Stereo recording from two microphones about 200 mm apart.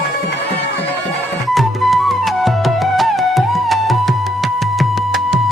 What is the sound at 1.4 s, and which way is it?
Music, centre (ahead or behind).